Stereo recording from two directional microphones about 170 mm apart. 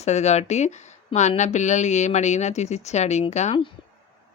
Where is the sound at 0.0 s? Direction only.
40° left (ahead or behind).